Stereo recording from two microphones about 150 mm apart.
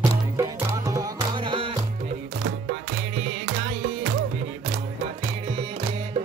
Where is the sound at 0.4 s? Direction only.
20° right (ahead or behind).